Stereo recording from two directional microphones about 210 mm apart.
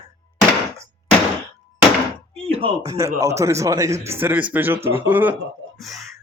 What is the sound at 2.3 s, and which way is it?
Speech, 25° right (ahead or behind).